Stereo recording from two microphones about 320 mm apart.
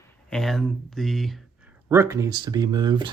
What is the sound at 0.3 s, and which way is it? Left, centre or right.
Speech, centre.